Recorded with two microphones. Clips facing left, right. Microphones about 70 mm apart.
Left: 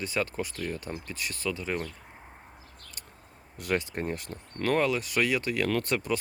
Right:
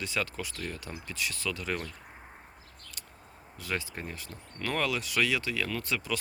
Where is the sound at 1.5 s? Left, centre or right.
Left.